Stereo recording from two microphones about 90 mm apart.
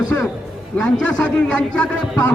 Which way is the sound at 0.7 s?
10° left (ahead or behind).